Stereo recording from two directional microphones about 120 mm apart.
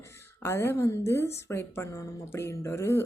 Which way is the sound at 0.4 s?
20° left (ahead or behind).